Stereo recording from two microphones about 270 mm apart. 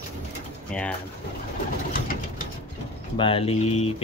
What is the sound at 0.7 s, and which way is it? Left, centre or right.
Speech, centre.